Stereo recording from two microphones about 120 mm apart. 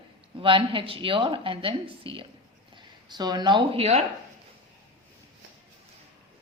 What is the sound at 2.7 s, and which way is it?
Speech, 35° right (ahead or behind).